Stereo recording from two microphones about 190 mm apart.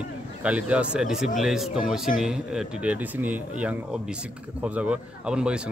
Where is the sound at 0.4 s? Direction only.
5° right (ahead or behind).